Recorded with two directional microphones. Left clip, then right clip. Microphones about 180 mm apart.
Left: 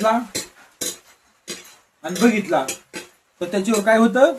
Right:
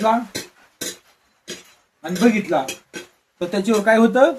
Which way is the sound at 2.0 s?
20° right (ahead or behind).